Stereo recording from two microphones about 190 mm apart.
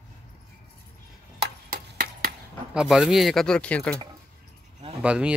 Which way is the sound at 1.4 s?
50° right (ahead or behind).